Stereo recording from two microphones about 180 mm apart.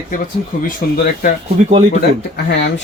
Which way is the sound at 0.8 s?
55° left (ahead or behind).